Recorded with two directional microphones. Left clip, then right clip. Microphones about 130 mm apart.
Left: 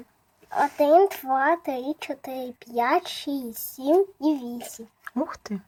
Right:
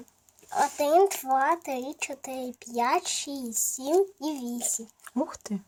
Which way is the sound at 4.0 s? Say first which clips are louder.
Left 4 dB; centre (ahead or behind).